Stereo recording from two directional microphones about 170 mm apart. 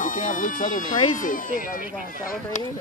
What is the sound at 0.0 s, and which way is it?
Speech, 50° left (ahead or behind).